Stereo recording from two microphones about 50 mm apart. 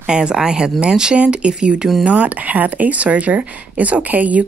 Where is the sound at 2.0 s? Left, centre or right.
Right.